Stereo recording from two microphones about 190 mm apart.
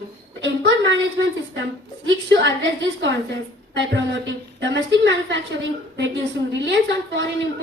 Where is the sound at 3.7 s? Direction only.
70° right (ahead or behind).